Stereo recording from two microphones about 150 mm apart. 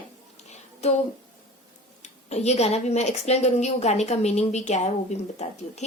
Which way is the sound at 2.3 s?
45° left (ahead or behind).